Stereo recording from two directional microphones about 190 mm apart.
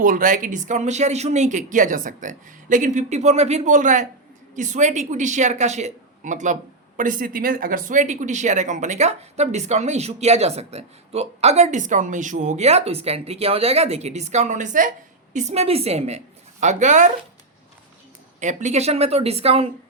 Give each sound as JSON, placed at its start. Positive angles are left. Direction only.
{"t": 0.0, "sound": "a woman's voice", "side_deg": -45}
{"t": 18.3, "sound": "speech", "side_deg": -40}